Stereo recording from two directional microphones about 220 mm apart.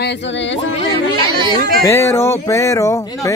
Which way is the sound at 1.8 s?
10° left (ahead or behind).